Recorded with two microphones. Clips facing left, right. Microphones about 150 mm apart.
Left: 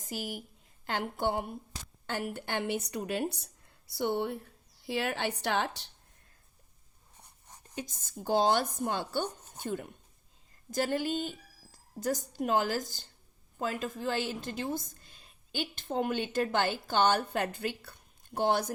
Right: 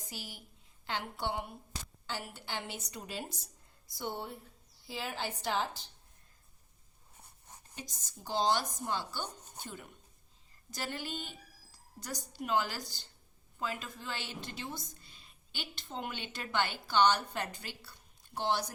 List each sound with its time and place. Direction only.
0.0 s a woman's voice: 50° left (ahead or behind); by 5.9 s 70° left (ahead or behind)
7.8 s a woman's voice: 55° left (ahead or behind)